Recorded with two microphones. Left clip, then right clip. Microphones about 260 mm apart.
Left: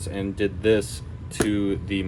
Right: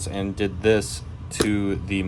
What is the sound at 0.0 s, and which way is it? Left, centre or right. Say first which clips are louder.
Speech: even; right.